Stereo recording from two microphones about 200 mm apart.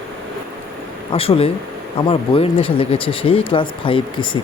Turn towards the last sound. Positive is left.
turn(degrees=25)  # may be behind; listen again after turning